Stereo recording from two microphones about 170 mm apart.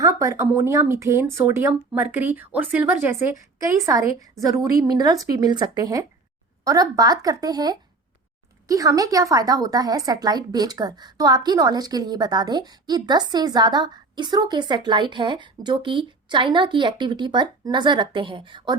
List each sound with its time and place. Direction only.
0.0 s a woman's voice: 20° right (ahead or behind)